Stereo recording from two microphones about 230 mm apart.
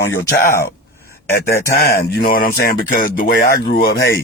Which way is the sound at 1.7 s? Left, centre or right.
Left.